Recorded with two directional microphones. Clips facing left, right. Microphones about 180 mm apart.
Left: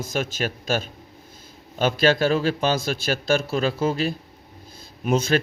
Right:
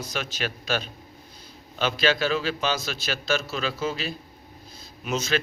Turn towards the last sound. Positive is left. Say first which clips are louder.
# left 6 dB
turn(degrees=50)  # may be behind; listen again after turning